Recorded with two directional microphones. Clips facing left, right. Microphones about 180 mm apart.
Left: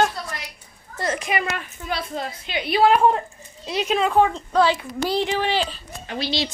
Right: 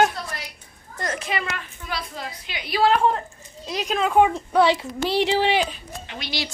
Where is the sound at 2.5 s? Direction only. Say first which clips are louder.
Left 3 dB; 20° left (ahead or behind).